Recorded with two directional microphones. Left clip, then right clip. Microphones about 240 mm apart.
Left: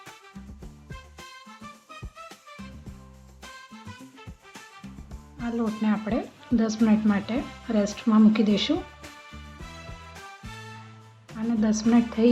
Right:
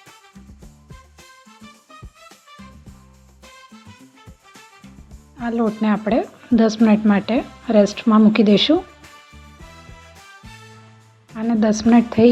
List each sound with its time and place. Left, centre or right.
5.4 s speech: right
11.3 s a woman's voice: right